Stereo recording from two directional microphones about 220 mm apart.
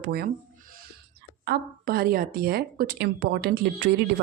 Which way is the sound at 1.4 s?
45° right (ahead or behind).